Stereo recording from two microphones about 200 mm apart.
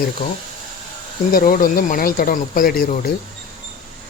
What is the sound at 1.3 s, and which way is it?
Speech, 45° left (ahead or behind).